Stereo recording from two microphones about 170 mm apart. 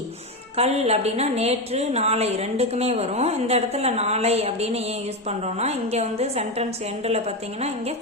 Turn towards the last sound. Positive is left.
turn(degrees=-40)  # may be behind; listen again after turning